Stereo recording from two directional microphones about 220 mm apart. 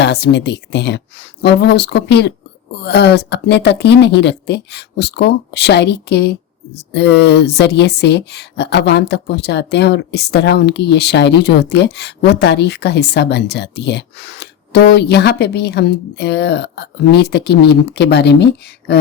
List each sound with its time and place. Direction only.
0.0 s speech: 50° left (ahead or behind)